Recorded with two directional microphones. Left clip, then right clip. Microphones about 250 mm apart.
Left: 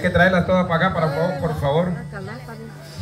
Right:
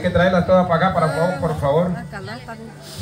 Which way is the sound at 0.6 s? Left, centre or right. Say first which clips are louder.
Right 3 dB; centre.